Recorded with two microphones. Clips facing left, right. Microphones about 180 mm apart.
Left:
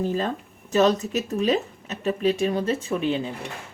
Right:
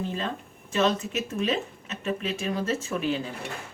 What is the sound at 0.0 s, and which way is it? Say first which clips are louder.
Speech: left 6 dB; 40° left (ahead or behind).